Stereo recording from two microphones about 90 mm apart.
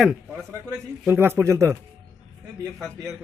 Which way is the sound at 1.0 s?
25° right (ahead or behind).